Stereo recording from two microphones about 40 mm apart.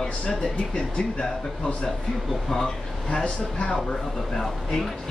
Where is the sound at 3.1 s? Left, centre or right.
Left.